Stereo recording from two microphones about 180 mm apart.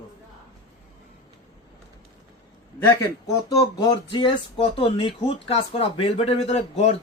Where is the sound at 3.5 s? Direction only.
25° left (ahead or behind).